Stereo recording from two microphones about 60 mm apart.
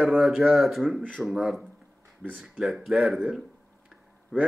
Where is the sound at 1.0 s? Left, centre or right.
Right.